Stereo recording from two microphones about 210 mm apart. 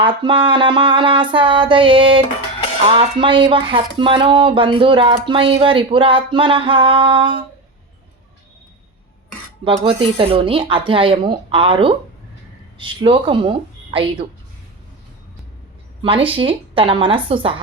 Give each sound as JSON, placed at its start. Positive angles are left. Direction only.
{"t": 0.0, "sound": "speech", "side_deg": -25}
{"t": 9.6, "sound": "speech", "side_deg": -25}
{"t": 16.0, "sound": "speech", "side_deg": -25}